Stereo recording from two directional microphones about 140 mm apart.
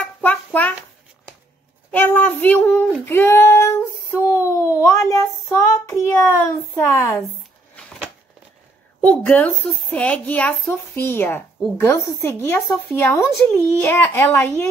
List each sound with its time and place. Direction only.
0.0 s music: 10° left (ahead or behind)
1.9 s speech: 15° left (ahead or behind)
9.0 s speech: 10° left (ahead or behind)